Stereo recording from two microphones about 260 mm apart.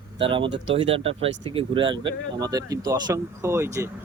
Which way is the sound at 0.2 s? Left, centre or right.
Centre.